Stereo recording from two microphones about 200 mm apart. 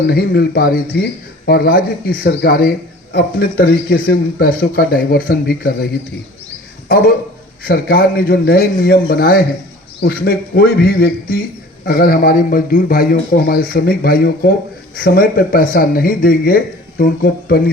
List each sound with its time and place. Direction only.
0.1 s speech: 50° left (ahead or behind)